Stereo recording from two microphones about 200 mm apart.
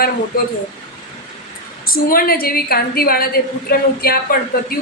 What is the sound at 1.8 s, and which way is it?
A woman's voice, 45° left (ahead or behind).